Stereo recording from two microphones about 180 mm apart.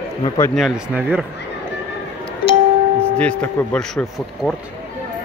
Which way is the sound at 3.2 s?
10° left (ahead or behind).